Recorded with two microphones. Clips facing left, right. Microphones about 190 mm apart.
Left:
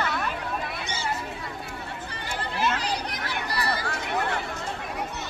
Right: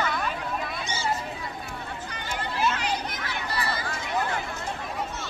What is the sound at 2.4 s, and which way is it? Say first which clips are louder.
Children playing: even; 35° left (ahead or behind).